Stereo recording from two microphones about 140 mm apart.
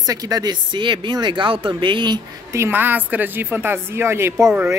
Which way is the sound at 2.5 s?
15° right (ahead or behind).